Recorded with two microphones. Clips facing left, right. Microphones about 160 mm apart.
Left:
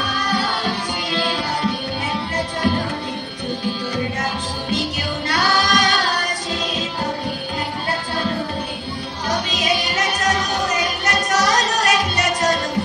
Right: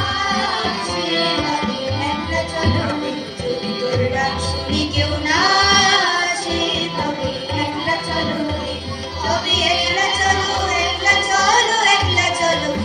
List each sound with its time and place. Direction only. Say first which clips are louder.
0.3 s music: right 1 dB; 40° right (ahead or behind)
4.2 s music: right 3 dB; 40° right (ahead or behind)
5.3 s singing: even; 40° right (ahead or behind)
9.3 s music: right 2 dB; 40° right (ahead or behind)